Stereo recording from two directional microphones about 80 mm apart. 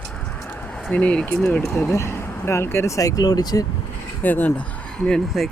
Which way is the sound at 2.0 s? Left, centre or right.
Left.